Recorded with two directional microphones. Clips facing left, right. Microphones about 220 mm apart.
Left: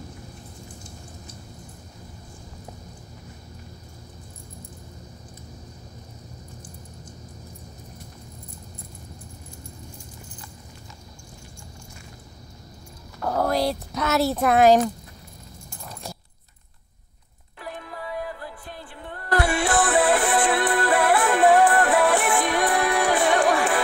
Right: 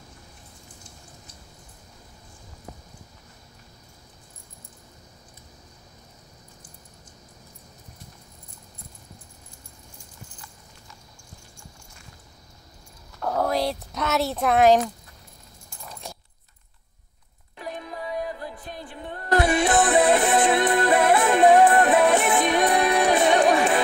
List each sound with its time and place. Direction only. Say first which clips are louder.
13.2 s speech: left 1 dB; centre (ahead or behind)
17.6 s music: right 2 dB; 20° right (ahead or behind)